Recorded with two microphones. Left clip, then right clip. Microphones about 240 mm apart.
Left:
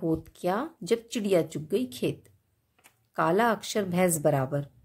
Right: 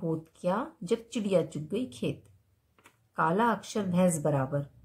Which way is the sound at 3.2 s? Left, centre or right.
Left.